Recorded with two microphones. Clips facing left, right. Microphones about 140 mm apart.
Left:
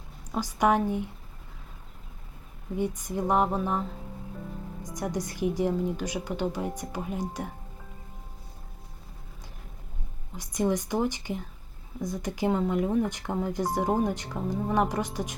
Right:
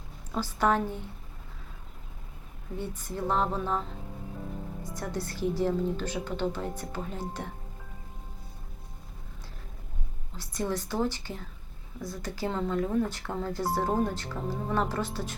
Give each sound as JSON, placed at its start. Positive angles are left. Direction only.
{"t": 0.3, "sound": "a woman's voice", "side_deg": 15}
{"t": 2.7, "sound": "a woman's voice", "side_deg": 15}
{"t": 4.9, "sound": "a woman's voice", "side_deg": 15}
{"t": 10.3, "sound": "a woman's voice", "side_deg": 15}